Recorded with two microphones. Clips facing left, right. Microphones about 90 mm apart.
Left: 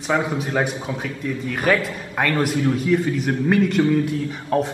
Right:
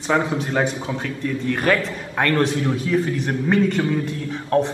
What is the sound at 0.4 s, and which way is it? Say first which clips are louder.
A man's voice: right 1 dB; 5° left (ahead or behind).